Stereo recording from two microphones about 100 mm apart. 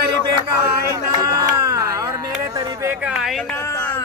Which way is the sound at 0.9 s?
35° right (ahead or behind).